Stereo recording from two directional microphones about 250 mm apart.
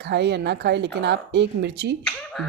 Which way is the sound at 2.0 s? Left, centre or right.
Centre.